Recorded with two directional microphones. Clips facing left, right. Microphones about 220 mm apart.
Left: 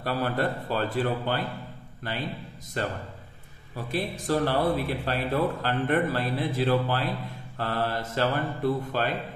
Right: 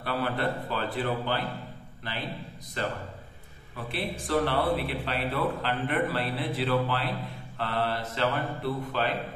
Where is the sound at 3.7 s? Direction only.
40° left (ahead or behind).